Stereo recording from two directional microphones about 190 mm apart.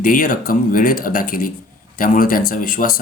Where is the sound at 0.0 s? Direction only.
45° left (ahead or behind).